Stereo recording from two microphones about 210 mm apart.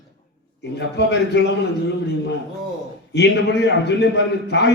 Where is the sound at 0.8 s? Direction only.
55° left (ahead or behind).